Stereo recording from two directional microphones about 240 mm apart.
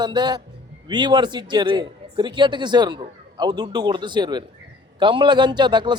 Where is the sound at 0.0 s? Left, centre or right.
Centre.